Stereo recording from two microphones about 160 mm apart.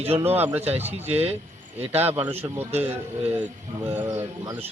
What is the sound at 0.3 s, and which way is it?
Speech, 10° right (ahead or behind).